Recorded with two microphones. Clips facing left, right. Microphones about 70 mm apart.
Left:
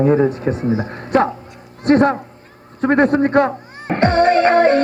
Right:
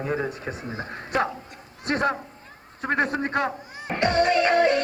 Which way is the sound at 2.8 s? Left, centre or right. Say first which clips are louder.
Left 11 dB; left.